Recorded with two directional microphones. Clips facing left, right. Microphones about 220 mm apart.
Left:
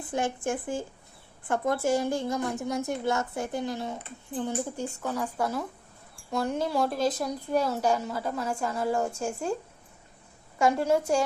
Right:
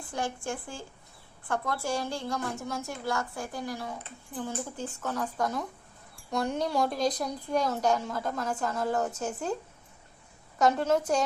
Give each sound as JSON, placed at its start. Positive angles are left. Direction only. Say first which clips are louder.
{"t": 0.0, "sound": "a woman's voice", "louder": "left 5 dB", "side_deg": 20}
{"t": 10.6, "sound": "a woman's voice", "louder": "left 1 dB", "side_deg": 10}